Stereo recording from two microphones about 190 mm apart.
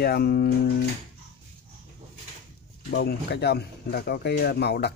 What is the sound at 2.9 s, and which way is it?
Speech, 60° left (ahead or behind).